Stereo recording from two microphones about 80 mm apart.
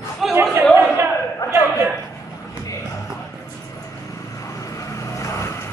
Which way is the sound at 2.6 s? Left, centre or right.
Left.